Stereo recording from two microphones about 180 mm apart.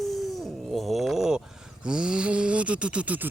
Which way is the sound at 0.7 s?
Centre (ahead or behind).